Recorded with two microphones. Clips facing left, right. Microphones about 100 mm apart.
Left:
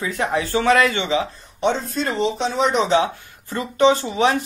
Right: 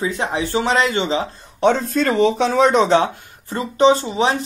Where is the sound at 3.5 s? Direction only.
25° right (ahead or behind).